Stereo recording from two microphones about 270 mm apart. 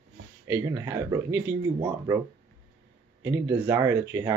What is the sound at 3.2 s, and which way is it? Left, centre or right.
Speech, centre.